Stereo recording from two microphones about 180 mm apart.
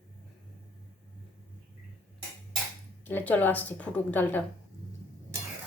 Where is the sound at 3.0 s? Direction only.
10° left (ahead or behind).